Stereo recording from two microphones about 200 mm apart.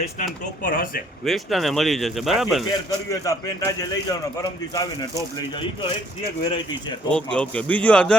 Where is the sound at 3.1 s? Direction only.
15° left (ahead or behind).